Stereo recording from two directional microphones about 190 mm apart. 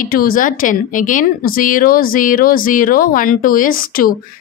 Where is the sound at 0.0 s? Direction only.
50° left (ahead or behind).